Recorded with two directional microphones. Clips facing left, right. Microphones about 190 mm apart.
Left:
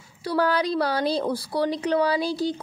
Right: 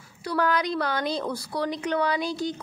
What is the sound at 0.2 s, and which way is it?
A woman's voice, 30° left (ahead or behind).